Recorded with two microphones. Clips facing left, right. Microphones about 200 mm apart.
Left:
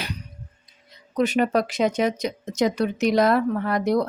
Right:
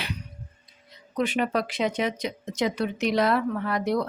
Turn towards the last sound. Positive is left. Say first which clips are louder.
# left 4 dB
turn(degrees=45)  # may be behind; listen again after turning